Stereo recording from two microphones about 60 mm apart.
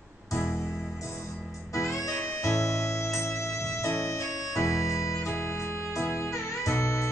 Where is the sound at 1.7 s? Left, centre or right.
Left.